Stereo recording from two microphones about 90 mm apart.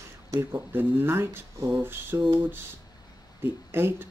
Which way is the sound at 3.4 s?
25° right (ahead or behind).